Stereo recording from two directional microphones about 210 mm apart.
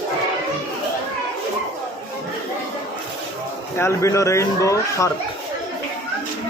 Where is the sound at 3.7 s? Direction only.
15° left (ahead or behind).